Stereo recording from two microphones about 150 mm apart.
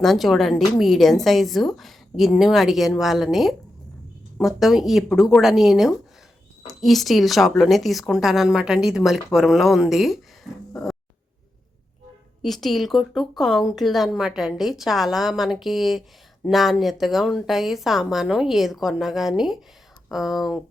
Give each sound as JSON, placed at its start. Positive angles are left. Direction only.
{"t": 0.0, "sound": "speech", "side_deg": 0}
{"t": 12.4, "sound": "speech", "side_deg": 0}